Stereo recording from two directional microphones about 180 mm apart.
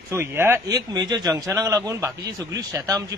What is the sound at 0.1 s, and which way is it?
A man's voice, 15° right (ahead or behind).